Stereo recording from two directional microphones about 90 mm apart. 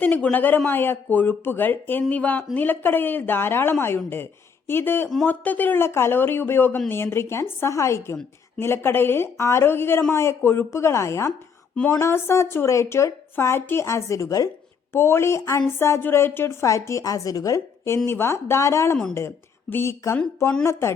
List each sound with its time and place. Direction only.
0.0 s a woman's voice: 15° left (ahead or behind); by 14.5 s 40° left (ahead or behind)
14.9 s a woman's voice: 30° left (ahead or behind)